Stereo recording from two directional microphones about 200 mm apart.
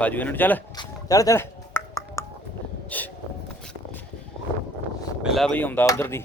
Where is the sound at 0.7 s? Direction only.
20° left (ahead or behind).